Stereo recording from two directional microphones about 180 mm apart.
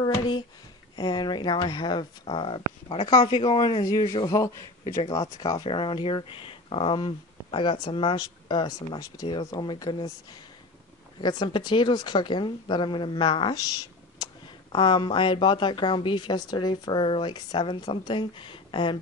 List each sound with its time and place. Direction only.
0.0 s speech: 20° left (ahead or behind)
11.1 s speech: 25° left (ahead or behind)